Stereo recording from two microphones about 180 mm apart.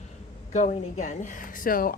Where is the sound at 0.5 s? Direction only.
40° left (ahead or behind).